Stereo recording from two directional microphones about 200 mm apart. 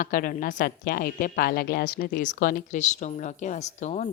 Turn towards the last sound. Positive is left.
turn(degrees=35)  # may be behind; listen again after turning